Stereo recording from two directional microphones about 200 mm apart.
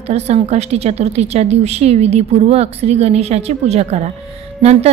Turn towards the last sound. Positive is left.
turn(degrees=-30)  # may be behind; listen again after turning